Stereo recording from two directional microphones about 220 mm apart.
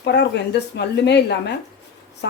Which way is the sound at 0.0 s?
50° left (ahead or behind).